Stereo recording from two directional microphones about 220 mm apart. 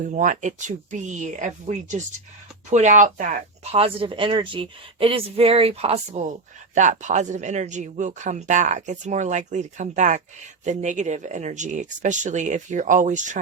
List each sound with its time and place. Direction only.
0.0 s speech: 35° right (ahead or behind)